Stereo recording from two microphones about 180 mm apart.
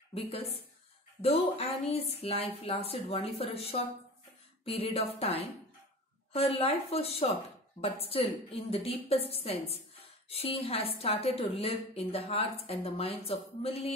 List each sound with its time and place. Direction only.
0.1 s a woman's voice: 35° left (ahead or behind)